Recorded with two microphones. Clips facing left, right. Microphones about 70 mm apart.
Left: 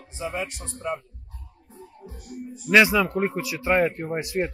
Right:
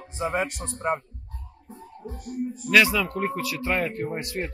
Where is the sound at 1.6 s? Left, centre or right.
Right.